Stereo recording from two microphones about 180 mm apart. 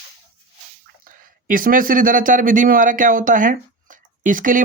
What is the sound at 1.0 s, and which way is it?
A man's voice, 50° right (ahead or behind).